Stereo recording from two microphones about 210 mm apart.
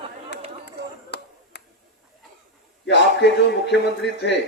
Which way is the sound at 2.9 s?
55° left (ahead or behind).